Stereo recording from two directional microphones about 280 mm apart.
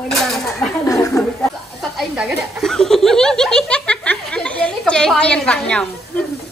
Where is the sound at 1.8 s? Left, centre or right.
Centre.